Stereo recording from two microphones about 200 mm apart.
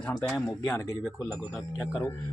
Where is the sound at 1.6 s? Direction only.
15° left (ahead or behind).